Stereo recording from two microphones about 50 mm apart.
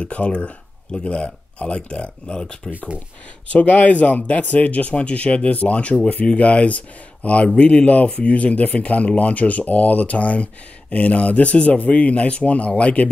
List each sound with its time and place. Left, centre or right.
0.0 s speech: left
3.5 s speech: left